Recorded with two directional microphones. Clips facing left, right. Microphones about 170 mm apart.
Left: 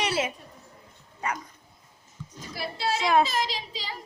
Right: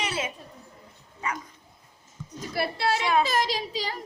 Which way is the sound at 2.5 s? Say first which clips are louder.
Right 3 dB; 65° right (ahead or behind).